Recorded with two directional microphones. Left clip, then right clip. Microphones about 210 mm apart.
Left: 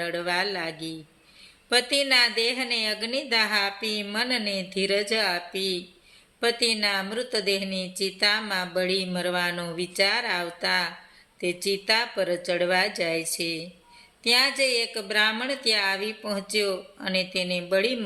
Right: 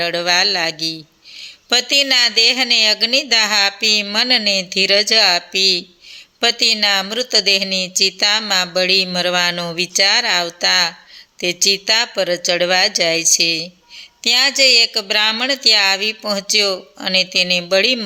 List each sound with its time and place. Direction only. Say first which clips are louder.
0.0 s a woman's voice: right 11 dB; 40° right (ahead or behind)